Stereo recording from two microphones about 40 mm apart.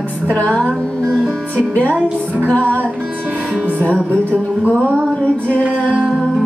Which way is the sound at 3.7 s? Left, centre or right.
Left.